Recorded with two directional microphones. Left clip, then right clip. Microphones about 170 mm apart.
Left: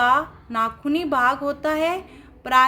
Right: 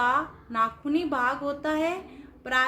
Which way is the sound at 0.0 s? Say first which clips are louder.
Left 6 dB; 35° left (ahead or behind).